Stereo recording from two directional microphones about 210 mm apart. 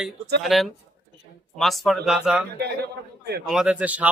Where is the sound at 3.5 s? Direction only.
5° right (ahead or behind).